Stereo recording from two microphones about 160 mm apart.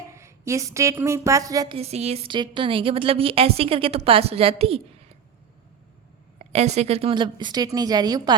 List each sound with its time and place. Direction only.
0.1 s a woman's voice: 20° right (ahead or behind)
1.7 s a woman's voice: 40° right (ahead or behind)
6.4 s a woman's voice: 45° right (ahead or behind); by 8.4 s 25° right (ahead or behind)